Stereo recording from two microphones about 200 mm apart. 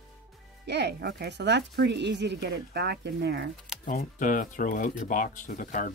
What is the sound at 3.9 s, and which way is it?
Speech, 40° left (ahead or behind).